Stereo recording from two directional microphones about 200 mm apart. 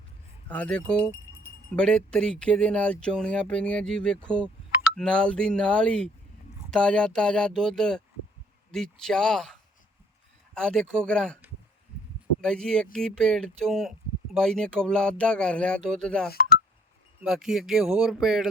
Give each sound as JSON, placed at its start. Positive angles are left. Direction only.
{"t": 0.4, "sound": "speech", "side_deg": 5}
{"t": 12.4, "sound": "speech", "side_deg": 5}
{"t": 16.3, "sound": "speech", "side_deg": 45}
{"t": 17.2, "sound": "speech", "side_deg": 0}